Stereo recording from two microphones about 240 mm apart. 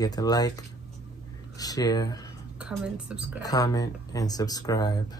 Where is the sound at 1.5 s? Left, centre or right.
Centre.